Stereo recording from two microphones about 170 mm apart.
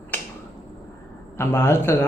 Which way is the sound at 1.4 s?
15° left (ahead or behind).